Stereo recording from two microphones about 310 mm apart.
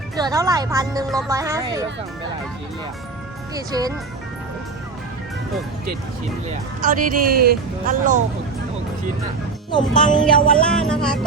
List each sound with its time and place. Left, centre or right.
0.2 s speech: centre
3.5 s speech: centre
6.8 s speech: right
10.2 s music: centre